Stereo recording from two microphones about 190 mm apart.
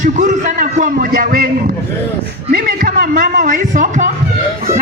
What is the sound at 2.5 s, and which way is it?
A man's voice, 50° right (ahead or behind).